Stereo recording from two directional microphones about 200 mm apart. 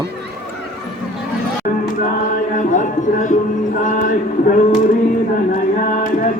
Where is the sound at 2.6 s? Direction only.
40° left (ahead or behind).